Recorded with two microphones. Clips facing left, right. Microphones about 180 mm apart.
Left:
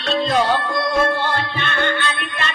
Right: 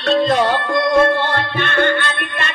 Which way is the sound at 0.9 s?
50° right (ahead or behind).